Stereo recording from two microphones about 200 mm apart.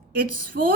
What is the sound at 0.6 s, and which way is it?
Female singing, 55° right (ahead or behind).